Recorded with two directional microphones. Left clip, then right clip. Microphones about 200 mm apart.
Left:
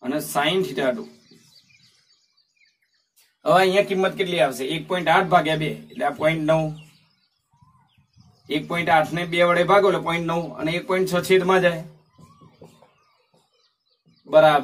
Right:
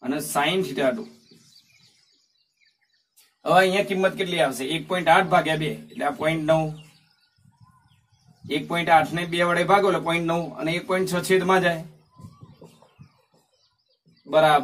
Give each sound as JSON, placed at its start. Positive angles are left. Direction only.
{"t": 0.0, "sound": "speech", "side_deg": 15}
{"t": 3.4, "sound": "a man's voice", "side_deg": 15}
{"t": 8.5, "sound": "a man's voice", "side_deg": 10}
{"t": 14.3, "sound": "a man's voice", "side_deg": 10}